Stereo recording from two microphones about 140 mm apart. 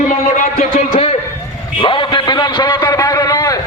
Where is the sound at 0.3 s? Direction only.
50° left (ahead or behind).